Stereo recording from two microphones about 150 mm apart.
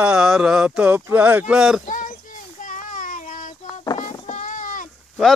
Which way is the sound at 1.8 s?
60° left (ahead or behind).